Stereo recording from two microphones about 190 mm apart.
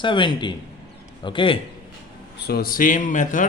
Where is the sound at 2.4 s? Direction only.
55° left (ahead or behind).